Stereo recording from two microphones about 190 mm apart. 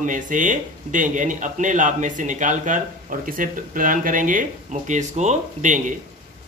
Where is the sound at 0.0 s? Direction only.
40° right (ahead or behind).